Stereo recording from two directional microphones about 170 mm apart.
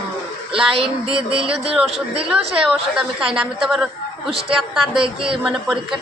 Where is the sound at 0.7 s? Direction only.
35° right (ahead or behind).